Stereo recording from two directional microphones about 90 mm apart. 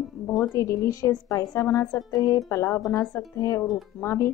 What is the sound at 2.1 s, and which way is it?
Speech, 45° left (ahead or behind).